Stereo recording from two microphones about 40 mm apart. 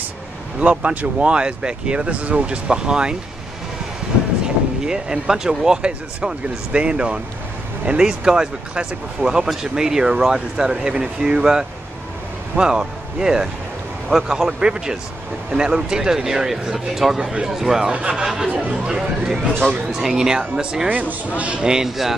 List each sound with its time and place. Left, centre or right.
0.6 s speech: right
4.8 s speech: centre
17.2 s speech: centre
17.9 s speech: right
18.2 s speech: centre
20.9 s speech: right
21.4 s speech: right
21.6 s speech: centre